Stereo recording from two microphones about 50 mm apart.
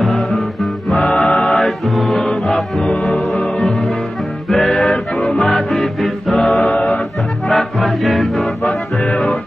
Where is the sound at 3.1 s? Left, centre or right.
Centre.